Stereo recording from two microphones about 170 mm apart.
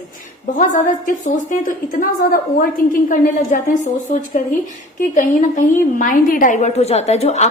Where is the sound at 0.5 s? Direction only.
50° left (ahead or behind).